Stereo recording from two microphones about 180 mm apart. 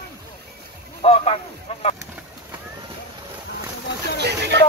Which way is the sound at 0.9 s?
35° left (ahead or behind).